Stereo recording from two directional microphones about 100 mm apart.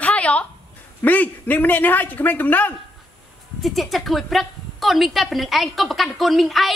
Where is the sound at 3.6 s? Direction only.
Centre (ahead or behind).